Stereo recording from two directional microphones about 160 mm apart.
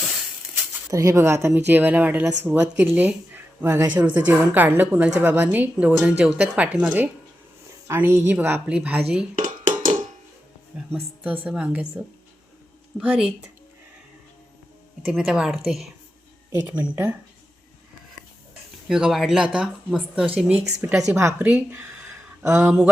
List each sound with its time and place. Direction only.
0.9 s speech: 20° right (ahead or behind); by 9.2 s 5° right (ahead or behind)
9.4 s dishes: 55° right (ahead or behind)
10.9 s speech: 10° right (ahead or behind)
13.0 s speech: 10° right (ahead or behind)
15.0 s speech: centre (ahead or behind)
18.9 s speech: 5° right (ahead or behind)